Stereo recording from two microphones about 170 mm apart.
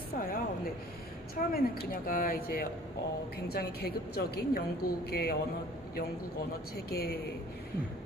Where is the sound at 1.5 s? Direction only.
60° left (ahead or behind).